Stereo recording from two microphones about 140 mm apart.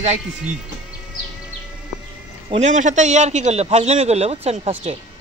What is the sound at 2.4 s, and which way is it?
A man's voice, 55° right (ahead or behind).